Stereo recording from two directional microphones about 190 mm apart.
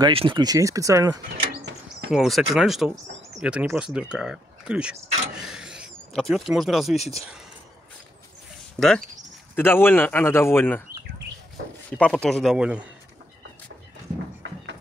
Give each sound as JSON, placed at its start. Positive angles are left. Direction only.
{"t": 0.0, "sound": "speech", "side_deg": -25}
{"t": 1.4, "sound": "a sound", "side_deg": -60}
{"t": 2.0, "sound": "speech", "side_deg": 0}
{"t": 5.4, "sound": "a sound", "side_deg": -5}
{"t": 7.2, "sound": "speech", "side_deg": -5}
{"t": 8.7, "sound": "speech", "side_deg": 5}
{"t": 12.0, "sound": "speech", "side_deg": 5}